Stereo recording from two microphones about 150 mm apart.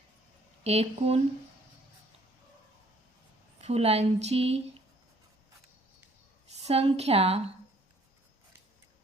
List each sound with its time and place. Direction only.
0.6 s speech: 45° right (ahead or behind)
3.6 s speech: 45° right (ahead or behind)
6.5 s a woman's voice: 45° right (ahead or behind)